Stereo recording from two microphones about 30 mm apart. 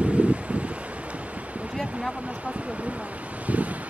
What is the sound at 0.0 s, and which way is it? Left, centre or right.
Wind, right.